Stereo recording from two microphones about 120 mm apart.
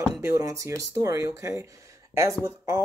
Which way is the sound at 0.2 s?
25° right (ahead or behind).